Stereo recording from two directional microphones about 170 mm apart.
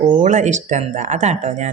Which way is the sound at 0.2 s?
45° right (ahead or behind).